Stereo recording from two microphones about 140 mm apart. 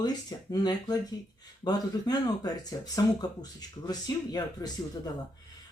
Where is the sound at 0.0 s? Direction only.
30° left (ahead or behind).